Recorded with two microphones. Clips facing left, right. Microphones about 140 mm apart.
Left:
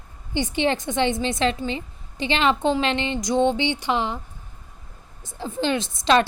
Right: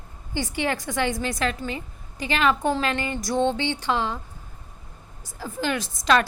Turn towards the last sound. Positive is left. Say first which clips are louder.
# left 2 dB
turn(degrees=25)  # may be behind; listen again after turning